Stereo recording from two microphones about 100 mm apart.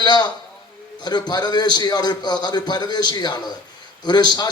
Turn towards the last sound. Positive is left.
turn(degrees=45)  # may be behind; listen again after turning